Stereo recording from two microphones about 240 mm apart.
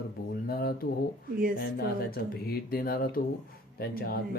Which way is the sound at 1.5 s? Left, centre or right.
Left.